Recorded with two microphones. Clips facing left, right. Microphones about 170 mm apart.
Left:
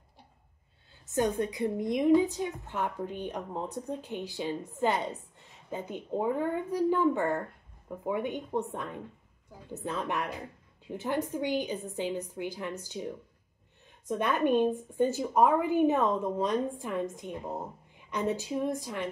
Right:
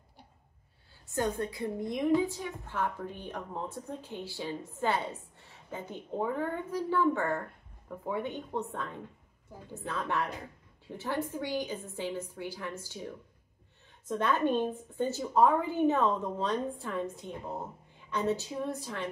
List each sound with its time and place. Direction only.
1.0 s a woman's voice: 20° left (ahead or behind)